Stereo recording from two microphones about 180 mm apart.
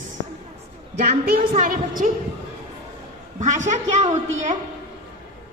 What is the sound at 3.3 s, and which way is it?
Speech, 40° right (ahead or behind).